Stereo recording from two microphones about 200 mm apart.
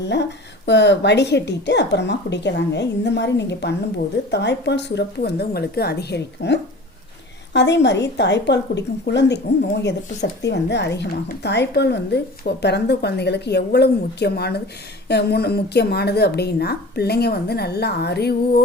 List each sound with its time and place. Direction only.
0.0 s a woman's voice: 60° left (ahead or behind)